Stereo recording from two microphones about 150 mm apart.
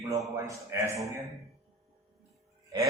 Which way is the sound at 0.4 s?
20° right (ahead or behind).